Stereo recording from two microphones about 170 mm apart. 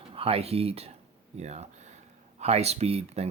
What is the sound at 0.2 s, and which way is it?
Speech, 35° right (ahead or behind).